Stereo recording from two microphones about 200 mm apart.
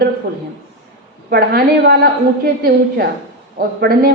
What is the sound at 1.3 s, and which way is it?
A woman's voice, 50° right (ahead or behind).